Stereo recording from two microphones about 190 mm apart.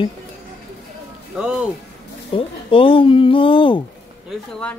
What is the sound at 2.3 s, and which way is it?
Speech, 30° left (ahead or behind).